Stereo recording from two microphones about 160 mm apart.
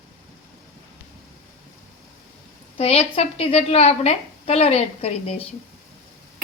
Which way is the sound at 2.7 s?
40° left (ahead or behind).